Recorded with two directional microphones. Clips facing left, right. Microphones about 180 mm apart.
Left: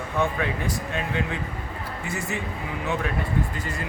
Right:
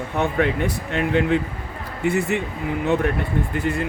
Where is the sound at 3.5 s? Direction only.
60° right (ahead or behind).